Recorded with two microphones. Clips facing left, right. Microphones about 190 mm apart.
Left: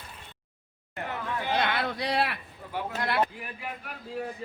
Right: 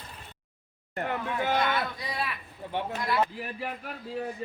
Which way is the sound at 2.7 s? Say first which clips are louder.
Right 1 dB; 25° right (ahead or behind).